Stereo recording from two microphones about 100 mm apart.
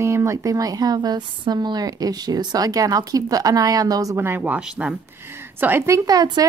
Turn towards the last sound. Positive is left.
turn(degrees=-40)  # may be behind; listen again after turning